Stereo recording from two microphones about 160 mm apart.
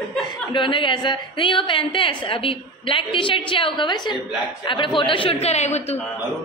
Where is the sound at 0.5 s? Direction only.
30° left (ahead or behind).